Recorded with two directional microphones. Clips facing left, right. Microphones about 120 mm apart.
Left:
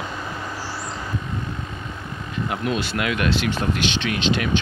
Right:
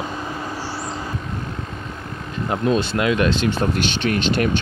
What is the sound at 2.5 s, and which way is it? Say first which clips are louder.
Speech: right 6 dB; 30° right (ahead or behind).